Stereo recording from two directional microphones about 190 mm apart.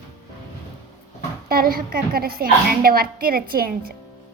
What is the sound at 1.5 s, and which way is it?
A woman's voice, 50° right (ahead or behind).